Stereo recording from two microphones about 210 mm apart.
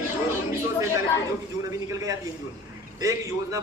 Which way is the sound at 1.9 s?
15° right (ahead or behind).